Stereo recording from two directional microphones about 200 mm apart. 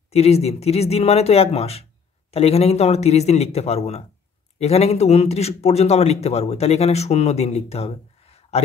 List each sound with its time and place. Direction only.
0.1 s speech: 30° left (ahead or behind)